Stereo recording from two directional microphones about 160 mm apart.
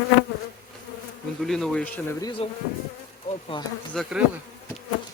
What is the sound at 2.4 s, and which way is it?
Bee, 35° left (ahead or behind).